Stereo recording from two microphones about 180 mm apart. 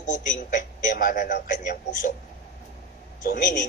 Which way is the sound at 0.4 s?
45° left (ahead or behind).